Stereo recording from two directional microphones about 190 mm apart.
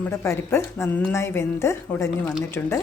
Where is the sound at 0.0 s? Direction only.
15° left (ahead or behind).